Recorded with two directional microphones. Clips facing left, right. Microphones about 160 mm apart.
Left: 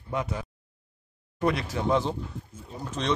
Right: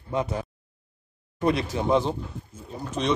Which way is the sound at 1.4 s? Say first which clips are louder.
Right 3 dB; 20° right (ahead or behind).